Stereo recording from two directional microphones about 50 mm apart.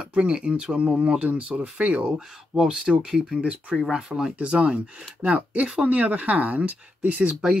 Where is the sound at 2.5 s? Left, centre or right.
Centre.